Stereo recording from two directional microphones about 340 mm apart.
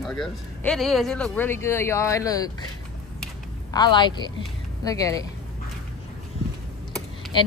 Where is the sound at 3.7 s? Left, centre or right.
Centre.